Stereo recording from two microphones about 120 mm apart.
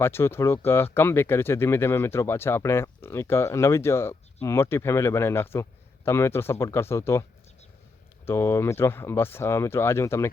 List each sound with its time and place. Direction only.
0.0 s speech: 20° left (ahead or behind)
8.3 s speech: 25° left (ahead or behind)